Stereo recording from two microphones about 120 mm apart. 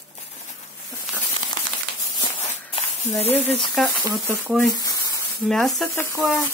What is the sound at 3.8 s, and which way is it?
Speech, centre (ahead or behind).